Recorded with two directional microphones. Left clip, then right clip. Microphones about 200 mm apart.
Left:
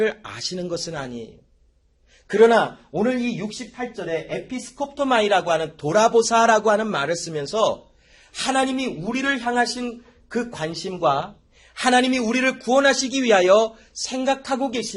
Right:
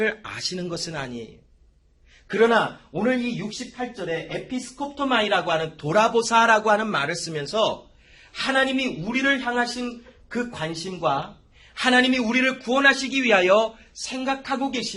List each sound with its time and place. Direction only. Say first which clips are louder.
0.0 s speech: left 2 dB; 15° left (ahead or behind)
2.2 s a man's voice: left 4 dB; 25° left (ahead or behind)
3.0 s speech: left 1 dB; 40° left (ahead or behind); by 7.8 s 20° left (ahead or behind)
8.3 s a man's voice: even; 35° left (ahead or behind)